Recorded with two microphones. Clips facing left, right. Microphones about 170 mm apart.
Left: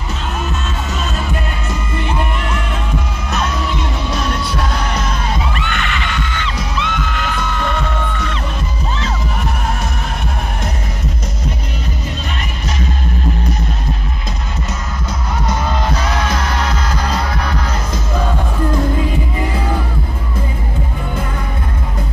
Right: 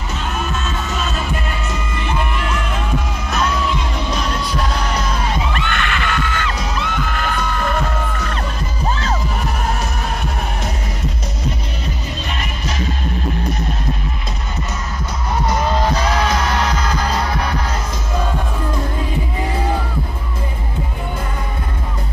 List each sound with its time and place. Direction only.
5.7 s music: 45° right (ahead or behind)